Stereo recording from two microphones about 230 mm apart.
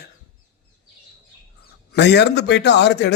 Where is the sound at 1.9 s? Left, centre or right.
Left.